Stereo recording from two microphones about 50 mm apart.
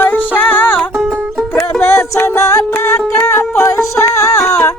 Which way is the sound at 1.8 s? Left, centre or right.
Left.